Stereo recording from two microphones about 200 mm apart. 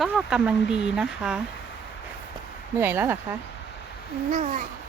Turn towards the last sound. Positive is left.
turn(degrees=-40)  # may be behind; listen again after turning